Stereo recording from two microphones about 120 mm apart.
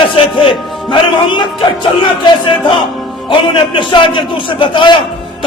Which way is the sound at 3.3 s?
45° left (ahead or behind).